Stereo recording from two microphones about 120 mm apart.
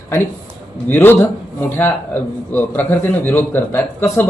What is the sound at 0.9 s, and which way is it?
A man's voice, 15° left (ahead or behind).